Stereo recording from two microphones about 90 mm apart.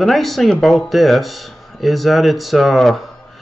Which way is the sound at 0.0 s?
Centre (ahead or behind).